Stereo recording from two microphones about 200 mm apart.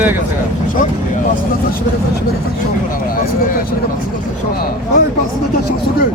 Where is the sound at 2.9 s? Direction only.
45° left (ahead or behind).